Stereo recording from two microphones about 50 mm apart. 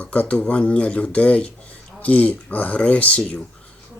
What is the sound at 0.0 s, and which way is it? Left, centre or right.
Speech, left.